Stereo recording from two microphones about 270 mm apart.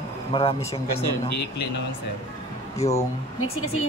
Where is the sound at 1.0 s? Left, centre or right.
Left.